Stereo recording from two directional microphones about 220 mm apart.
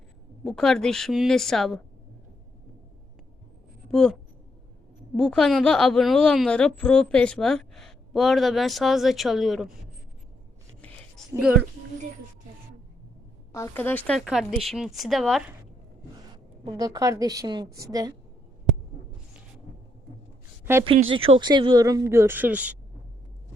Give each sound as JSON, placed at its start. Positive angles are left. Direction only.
{"t": 0.4, "sound": "a woman's voice", "side_deg": 5}
{"t": 3.9, "sound": "a woman's voice", "side_deg": 5}
{"t": 13.5, "sound": "a woman's voice", "side_deg": 10}
{"t": 16.6, "sound": "speech", "side_deg": -20}
{"t": 21.1, "sound": "speech", "side_deg": -25}